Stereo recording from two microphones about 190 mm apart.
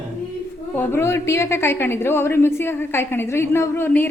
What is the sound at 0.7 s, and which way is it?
A woman's voice, 10° left (ahead or behind).